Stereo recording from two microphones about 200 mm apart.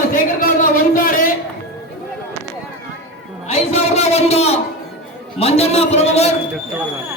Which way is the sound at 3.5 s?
30° left (ahead or behind).